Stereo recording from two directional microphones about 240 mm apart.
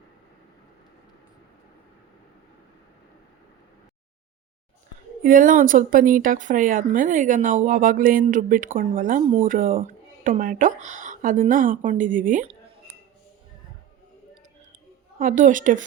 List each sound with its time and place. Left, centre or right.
5.2 s speech: right
15.2 s speech: right